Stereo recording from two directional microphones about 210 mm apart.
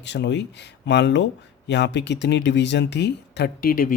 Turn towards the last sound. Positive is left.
turn(degrees=45)  # may be behind; listen again after turning